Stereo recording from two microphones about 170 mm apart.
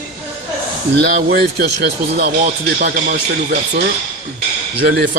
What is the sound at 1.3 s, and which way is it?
Speech, 70° right (ahead or behind).